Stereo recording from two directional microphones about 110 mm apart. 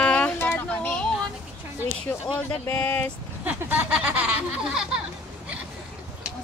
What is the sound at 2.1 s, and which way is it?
Speech, 20° left (ahead or behind).